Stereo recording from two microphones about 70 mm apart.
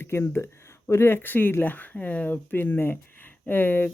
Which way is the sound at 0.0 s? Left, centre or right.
Left.